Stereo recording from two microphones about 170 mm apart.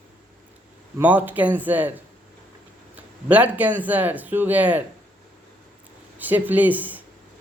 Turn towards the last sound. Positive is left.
turn(degrees=-10)  # may be behind; listen again after turning